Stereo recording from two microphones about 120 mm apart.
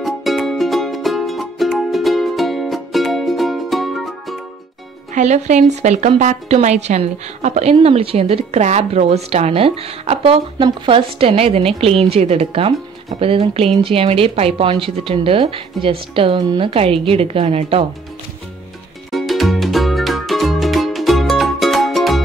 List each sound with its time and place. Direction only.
0.0 s music: centre (ahead or behind)
5.1 s a woman's voice: 75° right (ahead or behind); by 17.8 s 55° right (ahead or behind)
19.1 s music: centre (ahead or behind)